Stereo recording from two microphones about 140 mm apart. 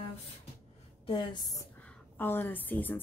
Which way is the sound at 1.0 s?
35° left (ahead or behind).